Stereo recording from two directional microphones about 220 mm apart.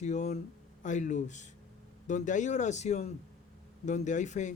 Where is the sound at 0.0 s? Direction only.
30° left (ahead or behind).